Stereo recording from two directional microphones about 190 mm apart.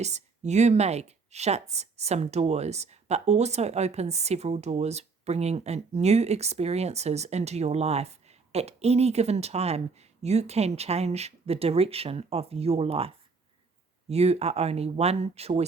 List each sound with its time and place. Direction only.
0.0 s speech: 35° right (ahead or behind)